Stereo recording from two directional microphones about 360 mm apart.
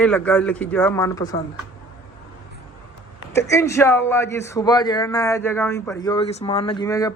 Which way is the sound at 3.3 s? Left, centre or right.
Centre.